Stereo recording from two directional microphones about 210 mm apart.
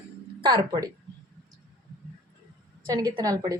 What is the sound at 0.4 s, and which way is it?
Speech, 20° right (ahead or behind).